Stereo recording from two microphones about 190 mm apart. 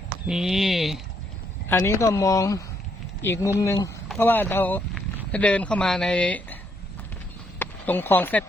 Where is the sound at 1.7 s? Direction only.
15° left (ahead or behind).